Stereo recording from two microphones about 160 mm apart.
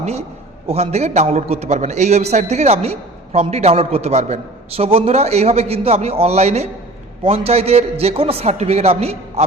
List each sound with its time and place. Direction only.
0.0 s a man's voice: 40° right (ahead or behind)